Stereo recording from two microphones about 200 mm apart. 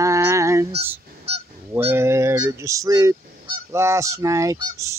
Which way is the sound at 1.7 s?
10° right (ahead or behind).